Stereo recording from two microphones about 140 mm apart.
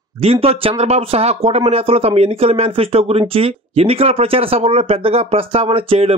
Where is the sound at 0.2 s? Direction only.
45° right (ahead or behind).